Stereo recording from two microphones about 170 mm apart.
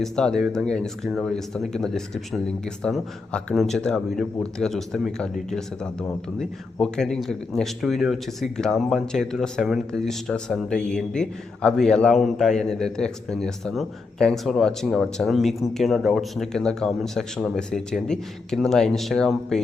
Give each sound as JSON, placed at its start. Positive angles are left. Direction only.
{"t": 0.0, "sound": "speech", "side_deg": 5}